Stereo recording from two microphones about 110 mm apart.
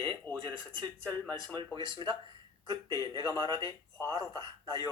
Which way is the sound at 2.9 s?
35° left (ahead or behind).